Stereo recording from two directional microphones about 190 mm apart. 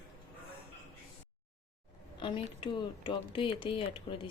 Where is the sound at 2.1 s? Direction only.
25° left (ahead or behind).